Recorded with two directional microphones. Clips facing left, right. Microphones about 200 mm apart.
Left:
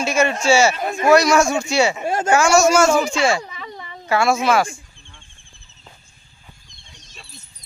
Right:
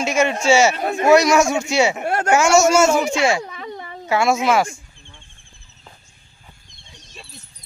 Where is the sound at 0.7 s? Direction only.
65° right (ahead or behind).